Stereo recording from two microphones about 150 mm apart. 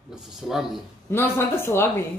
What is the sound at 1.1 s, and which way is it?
Speech, 15° left (ahead or behind).